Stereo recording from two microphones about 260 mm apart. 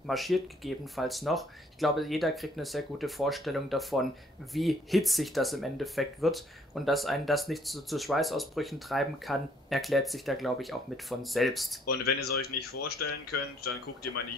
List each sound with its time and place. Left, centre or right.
0.0 s speech: centre
12.0 s speech: left
13.0 s speech: left